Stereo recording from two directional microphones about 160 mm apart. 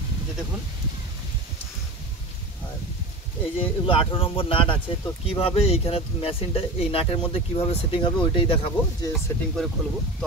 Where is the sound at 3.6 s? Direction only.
35° left (ahead or behind).